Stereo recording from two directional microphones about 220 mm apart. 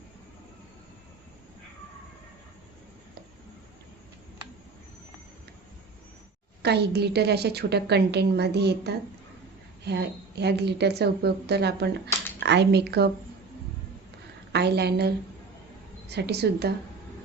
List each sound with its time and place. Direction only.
6.6 s a woman's voice: 50° right (ahead or behind)
14.5 s a woman's voice: 50° right (ahead or behind)